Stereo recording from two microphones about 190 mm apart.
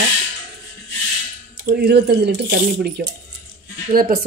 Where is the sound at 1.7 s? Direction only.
60° right (ahead or behind).